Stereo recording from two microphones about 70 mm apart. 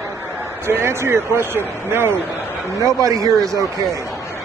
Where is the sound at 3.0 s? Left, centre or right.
Right.